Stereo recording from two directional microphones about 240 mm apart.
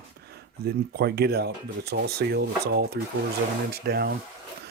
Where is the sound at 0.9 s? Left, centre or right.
Right.